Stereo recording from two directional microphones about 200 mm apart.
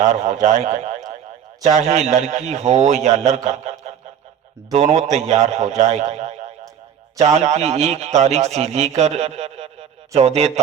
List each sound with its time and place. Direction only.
0.0 s a man's voice: 40° right (ahead or behind)